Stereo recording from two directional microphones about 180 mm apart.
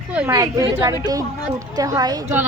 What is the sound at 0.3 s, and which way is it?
A woman's voice, 20° right (ahead or behind).